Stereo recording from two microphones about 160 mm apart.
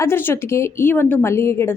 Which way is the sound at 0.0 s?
15° left (ahead or behind).